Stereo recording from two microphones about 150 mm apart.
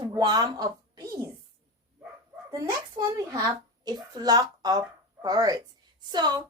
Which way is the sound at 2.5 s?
25° right (ahead or behind).